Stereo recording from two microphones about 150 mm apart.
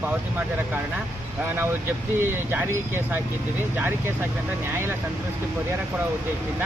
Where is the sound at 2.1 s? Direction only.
15° right (ahead or behind).